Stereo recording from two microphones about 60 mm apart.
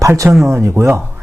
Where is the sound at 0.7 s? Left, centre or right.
Right.